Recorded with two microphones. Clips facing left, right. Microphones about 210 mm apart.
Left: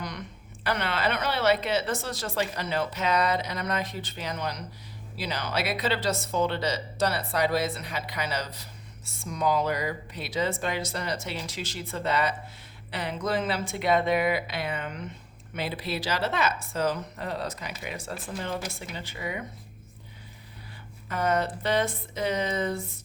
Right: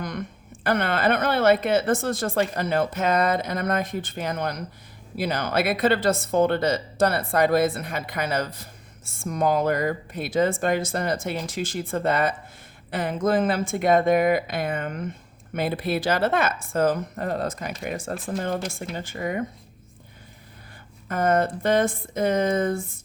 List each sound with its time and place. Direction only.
0.0 s speech: 50° right (ahead or behind)
21.1 s speech: 50° right (ahead or behind)